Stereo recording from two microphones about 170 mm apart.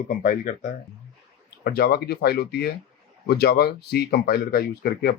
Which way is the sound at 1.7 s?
65° left (ahead or behind).